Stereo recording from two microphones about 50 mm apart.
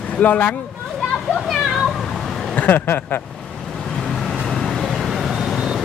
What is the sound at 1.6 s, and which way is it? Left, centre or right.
Cat, centre.